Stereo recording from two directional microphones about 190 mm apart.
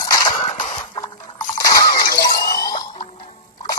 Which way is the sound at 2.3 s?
50° left (ahead or behind).